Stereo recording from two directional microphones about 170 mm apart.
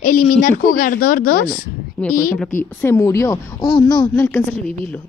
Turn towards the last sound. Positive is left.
turn(degrees=10)  # may be behind; listen again after turning